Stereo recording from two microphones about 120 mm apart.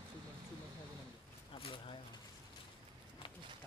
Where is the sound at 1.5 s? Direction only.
50° left (ahead or behind).